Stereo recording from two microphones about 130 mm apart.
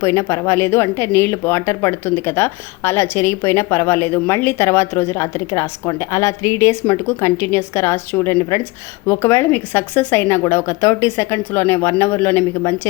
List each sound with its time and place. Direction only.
0.0 s speech: 20° left (ahead or behind)